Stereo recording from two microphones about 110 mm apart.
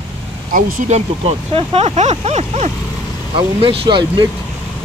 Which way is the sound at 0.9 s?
70° right (ahead or behind).